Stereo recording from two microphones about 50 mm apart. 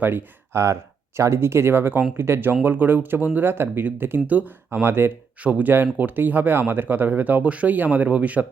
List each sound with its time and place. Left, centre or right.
0.0 s speech: right
0.5 s speech: right
2.1 s speech: right
2.6 s speech: right
4.3 s speech: right
4.7 s speech: right
5.4 s speech: right